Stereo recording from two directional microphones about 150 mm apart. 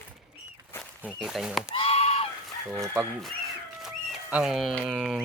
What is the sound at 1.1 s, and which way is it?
Speech, centre (ahead or behind).